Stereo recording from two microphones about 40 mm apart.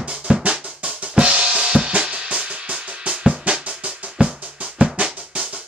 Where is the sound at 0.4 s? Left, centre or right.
Right.